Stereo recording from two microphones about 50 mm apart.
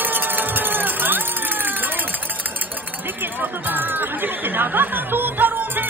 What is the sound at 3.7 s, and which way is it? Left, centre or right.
Speech, right.